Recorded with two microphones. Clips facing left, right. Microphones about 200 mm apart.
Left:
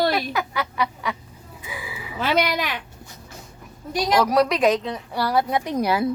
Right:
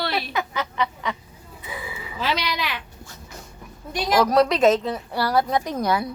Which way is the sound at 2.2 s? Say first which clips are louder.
Left 4 dB; 50° left (ahead or behind).